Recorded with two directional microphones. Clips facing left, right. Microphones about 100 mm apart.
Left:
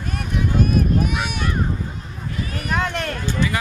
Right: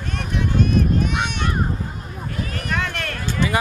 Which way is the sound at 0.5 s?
5° left (ahead or behind).